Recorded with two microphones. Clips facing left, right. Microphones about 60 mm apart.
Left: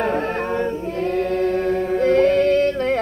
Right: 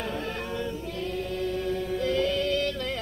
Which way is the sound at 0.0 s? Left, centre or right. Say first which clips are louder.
Left 11 dB; left.